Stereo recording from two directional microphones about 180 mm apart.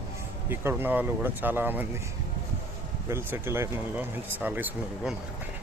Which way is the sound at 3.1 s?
15° right (ahead or behind).